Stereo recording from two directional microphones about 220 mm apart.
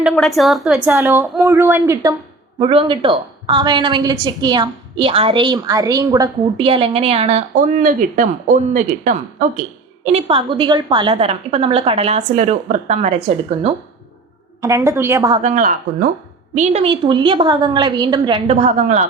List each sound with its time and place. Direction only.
0.0 s a woman's voice: centre (ahead or behind); by 13.1 s 30° right (ahead or behind)
14.6 s a woman's voice: 15° right (ahead or behind)
15.4 s speech: 35° right (ahead or behind)
16.6 s a woman's voice: 25° right (ahead or behind)